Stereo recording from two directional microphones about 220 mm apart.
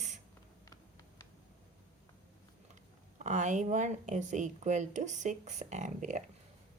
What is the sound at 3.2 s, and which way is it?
A woman's voice, 30° right (ahead or behind).